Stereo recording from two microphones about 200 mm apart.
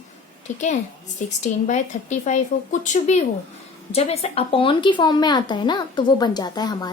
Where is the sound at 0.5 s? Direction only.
35° left (ahead or behind).